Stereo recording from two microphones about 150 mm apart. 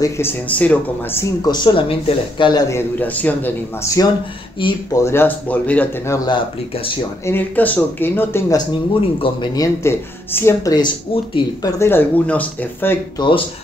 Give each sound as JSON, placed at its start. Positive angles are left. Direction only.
{"t": 0.0, "sound": "speech", "side_deg": 15}
{"t": 1.2, "sound": "speech", "side_deg": 25}
{"t": 2.7, "sound": "speech", "side_deg": 10}
{"t": 4.6, "sound": "speech", "side_deg": 30}
{"t": 5.0, "sound": "speech", "side_deg": 15}
{"t": 6.2, "sound": "speech", "side_deg": 30}
{"t": 7.2, "sound": "speech", "side_deg": 10}
{"t": 9.2, "sound": "speech", "side_deg": 30}
{"t": 9.8, "sound": "speech", "side_deg": 15}
{"t": 11.8, "sound": "speech", "side_deg": 10}
{"t": 13.2, "sound": "speech", "side_deg": 30}